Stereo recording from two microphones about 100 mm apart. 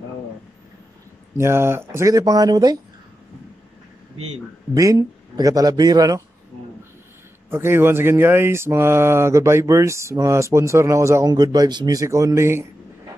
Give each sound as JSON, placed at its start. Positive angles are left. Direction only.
{"t": 1.4, "sound": "a man's voice", "side_deg": -25}
{"t": 4.7, "sound": "a man's voice", "side_deg": -40}
{"t": 7.4, "sound": "speech", "side_deg": -25}
{"t": 11.2, "sound": "a man's voice", "side_deg": -40}